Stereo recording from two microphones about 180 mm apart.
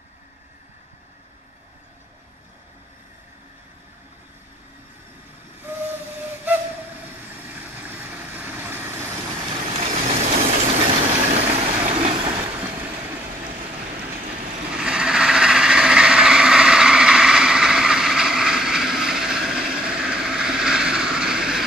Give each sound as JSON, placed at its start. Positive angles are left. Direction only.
{"t": 5.6, "sound": "whistle", "side_deg": -10}
{"t": 7.4, "sound": "vehicle", "side_deg": -10}
{"t": 9.5, "sound": "vehicle", "side_deg": -35}
{"t": 14.7, "sound": "vehicle", "side_deg": -5}